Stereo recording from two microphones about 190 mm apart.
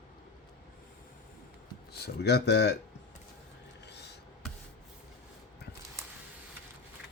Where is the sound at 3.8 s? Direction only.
60° left (ahead or behind).